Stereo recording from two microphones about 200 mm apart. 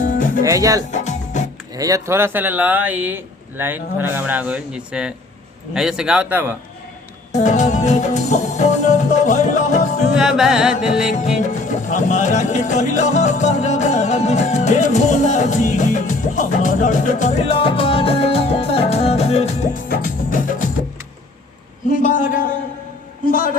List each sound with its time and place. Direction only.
0.0 s music: 40° left (ahead or behind)
0.4 s speech: 15° right (ahead or behind)
0.9 s music: 35° left (ahead or behind)
1.7 s speech: 15° right (ahead or behind)
5.7 s music: 5° right (ahead or behind)
7.3 s music: 35° left (ahead or behind)
10.2 s music: 5° right (ahead or behind)
11.1 s music: 40° left (ahead or behind)
21.8 s a man's voice: 40° left (ahead or behind)